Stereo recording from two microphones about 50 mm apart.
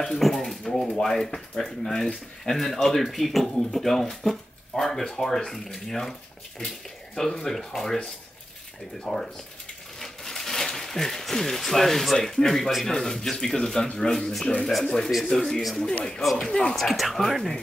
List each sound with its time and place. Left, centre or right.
0.2 s speech: centre
7.2 s speech: centre
14.7 s speech: centre